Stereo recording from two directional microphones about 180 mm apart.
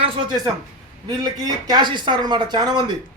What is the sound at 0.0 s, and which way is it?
Speech, 20° right (ahead or behind).